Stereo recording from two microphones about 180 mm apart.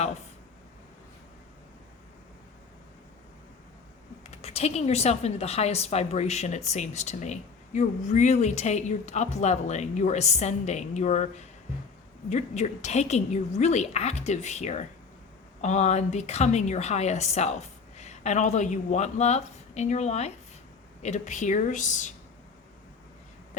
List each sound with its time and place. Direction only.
4.3 s speech: 35° left (ahead or behind)